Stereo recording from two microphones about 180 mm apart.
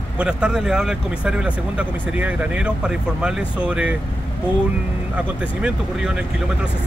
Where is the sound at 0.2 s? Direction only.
5° right (ahead or behind).